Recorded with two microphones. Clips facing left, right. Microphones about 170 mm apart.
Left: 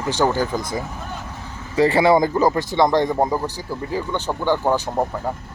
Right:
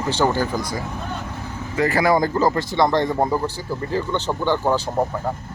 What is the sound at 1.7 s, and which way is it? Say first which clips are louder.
Speech: left 3 dB; 30° left (ahead or behind).